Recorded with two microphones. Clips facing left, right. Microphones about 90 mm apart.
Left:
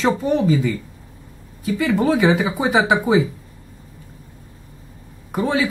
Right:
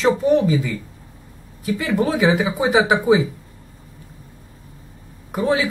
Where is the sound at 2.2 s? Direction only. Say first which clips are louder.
Even; centre (ahead or behind).